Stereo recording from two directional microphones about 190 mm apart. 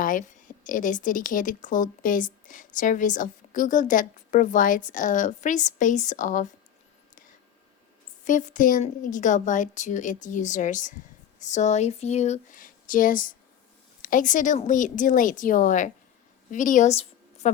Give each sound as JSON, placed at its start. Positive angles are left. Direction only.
{"t": 0.0, "sound": "speech", "side_deg": 45}
{"t": 8.2, "sound": "a woman's voice", "side_deg": 40}